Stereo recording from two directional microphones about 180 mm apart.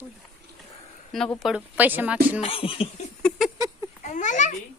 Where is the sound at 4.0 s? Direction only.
45° left (ahead or behind).